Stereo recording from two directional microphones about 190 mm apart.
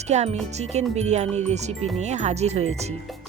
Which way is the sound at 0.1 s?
35° right (ahead or behind).